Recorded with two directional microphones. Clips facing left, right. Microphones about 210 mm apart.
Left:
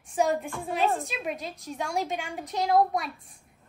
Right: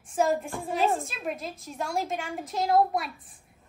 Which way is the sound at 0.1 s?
Centre (ahead or behind).